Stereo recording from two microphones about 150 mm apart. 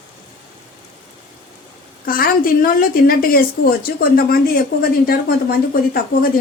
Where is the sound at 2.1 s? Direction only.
70° left (ahead or behind); by 6.0 s 90° left.